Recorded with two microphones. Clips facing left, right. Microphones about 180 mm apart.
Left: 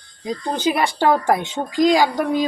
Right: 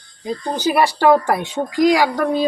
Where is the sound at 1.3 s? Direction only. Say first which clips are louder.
Even; 20° left (ahead or behind).